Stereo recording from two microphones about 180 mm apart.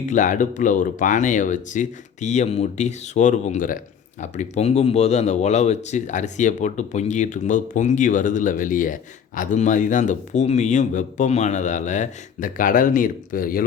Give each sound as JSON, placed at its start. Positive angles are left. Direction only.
{"t": 0.1, "sound": "speech", "side_deg": 45}